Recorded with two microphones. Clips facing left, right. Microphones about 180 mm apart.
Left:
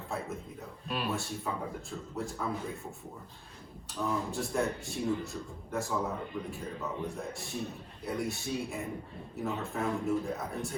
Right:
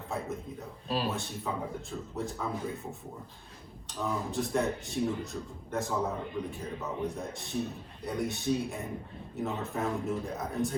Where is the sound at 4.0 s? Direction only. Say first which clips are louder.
Right 1 dB; centre (ahead or behind).